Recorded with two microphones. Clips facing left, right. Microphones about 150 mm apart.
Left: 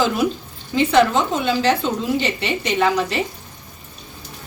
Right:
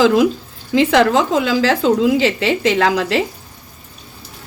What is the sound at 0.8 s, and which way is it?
A woman's voice, 90° right.